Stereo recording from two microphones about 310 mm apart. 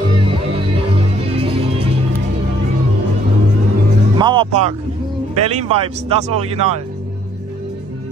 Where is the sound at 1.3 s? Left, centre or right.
Centre.